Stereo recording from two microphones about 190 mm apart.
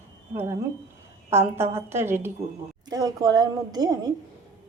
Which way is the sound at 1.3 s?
15° right (ahead or behind).